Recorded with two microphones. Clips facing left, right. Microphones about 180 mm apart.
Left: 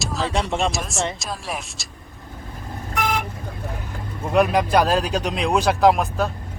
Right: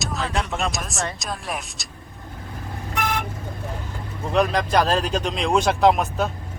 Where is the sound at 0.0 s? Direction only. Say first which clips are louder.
Left 2 dB; centre (ahead or behind).